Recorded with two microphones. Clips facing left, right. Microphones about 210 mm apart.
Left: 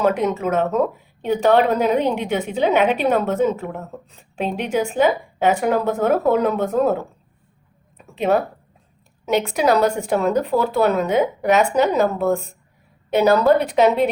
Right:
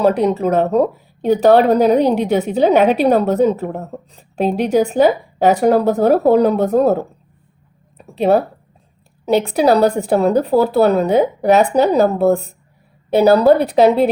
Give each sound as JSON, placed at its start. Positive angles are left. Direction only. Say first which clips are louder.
{"t": 0.0, "sound": "speech", "louder": "right 5 dB", "side_deg": -35}
{"t": 7.9, "sound": "a sound", "louder": "right 5 dB", "side_deg": -35}
{"t": 9.2, "sound": "speech", "louder": "right 5 dB", "side_deg": -35}